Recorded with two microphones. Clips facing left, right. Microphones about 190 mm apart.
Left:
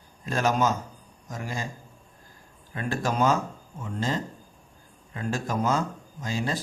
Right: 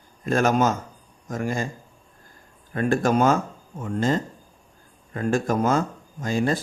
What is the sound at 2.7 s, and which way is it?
A man's voice, 55° right (ahead or behind).